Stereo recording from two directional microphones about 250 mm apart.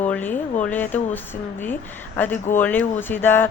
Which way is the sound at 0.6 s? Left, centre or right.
Centre.